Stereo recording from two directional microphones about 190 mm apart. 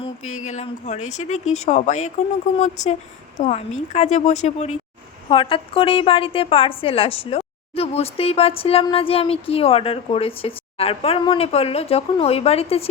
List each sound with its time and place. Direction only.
0.2 s a woman's voice: 40° left (ahead or behind)